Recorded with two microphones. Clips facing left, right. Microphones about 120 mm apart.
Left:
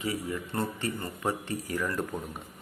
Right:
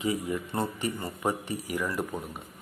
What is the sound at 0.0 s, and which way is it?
Speech, 20° right (ahead or behind).